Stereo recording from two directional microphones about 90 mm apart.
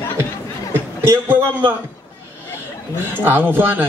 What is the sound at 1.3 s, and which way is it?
Speech, 20° right (ahead or behind).